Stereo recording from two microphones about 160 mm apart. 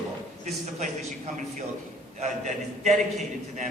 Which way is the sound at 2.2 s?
45° right (ahead or behind).